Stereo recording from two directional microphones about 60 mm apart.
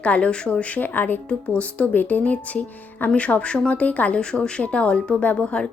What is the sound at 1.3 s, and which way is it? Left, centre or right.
A woman's voice, left.